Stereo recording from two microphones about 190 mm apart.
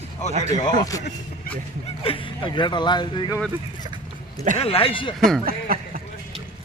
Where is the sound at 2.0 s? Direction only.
25° left (ahead or behind).